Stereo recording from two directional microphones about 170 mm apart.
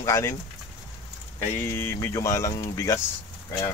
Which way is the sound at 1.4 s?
15° left (ahead or behind).